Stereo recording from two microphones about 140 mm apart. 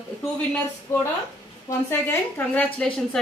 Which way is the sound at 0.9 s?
15° left (ahead or behind).